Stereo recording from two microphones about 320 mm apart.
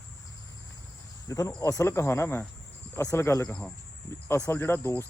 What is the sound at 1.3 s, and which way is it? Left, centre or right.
A man's voice, centre.